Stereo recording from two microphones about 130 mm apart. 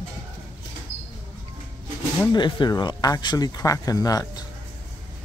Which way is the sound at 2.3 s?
35° left (ahead or behind).